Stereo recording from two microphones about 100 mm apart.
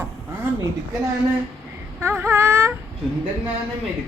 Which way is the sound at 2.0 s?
25° right (ahead or behind).